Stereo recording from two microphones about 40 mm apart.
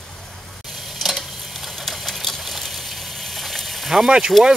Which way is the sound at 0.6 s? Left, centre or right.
Centre.